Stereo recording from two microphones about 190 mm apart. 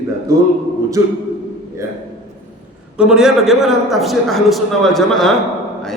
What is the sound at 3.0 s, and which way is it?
A man's voice, 5° right (ahead or behind).